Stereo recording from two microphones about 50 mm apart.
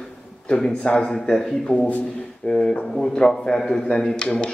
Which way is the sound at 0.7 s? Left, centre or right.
Centre.